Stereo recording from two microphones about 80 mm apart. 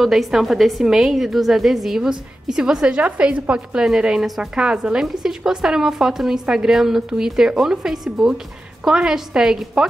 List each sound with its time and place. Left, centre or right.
0.0 s a woman's voice: centre